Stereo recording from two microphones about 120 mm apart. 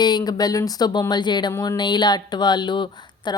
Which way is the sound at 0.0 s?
35° left (ahead or behind).